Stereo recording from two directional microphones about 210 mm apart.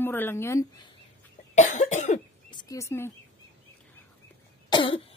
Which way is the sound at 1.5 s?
35° left (ahead or behind).